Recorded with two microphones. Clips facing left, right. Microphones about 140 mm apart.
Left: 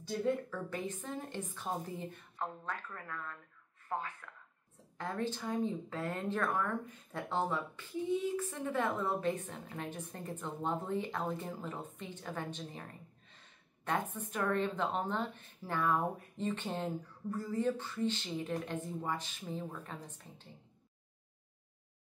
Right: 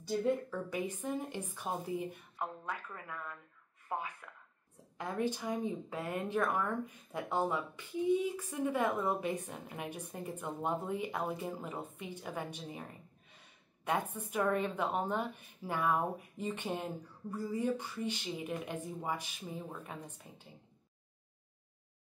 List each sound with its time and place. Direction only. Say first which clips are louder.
0.0 s speech: right 2 dB; 10° right (ahead or behind)
13.3 s gasp: right 1 dB; 10° right (ahead or behind)
14.1 s speech: right 2 dB; 10° right (ahead or behind)